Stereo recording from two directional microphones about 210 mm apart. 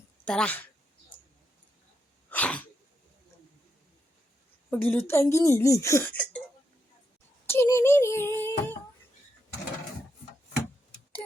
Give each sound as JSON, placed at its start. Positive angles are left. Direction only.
{"t": 0.3, "sound": "speech", "side_deg": 5}
{"t": 2.3, "sound": "sneeze", "side_deg": 5}
{"t": 4.7, "sound": "speech", "side_deg": 10}
{"t": 7.4, "sound": "a sound", "side_deg": 10}